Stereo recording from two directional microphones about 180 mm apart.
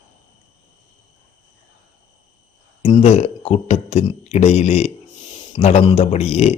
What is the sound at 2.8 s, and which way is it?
A man's voice, 35° left (ahead or behind).